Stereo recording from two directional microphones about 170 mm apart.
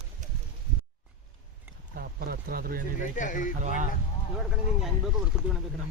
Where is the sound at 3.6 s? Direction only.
45° right (ahead or behind).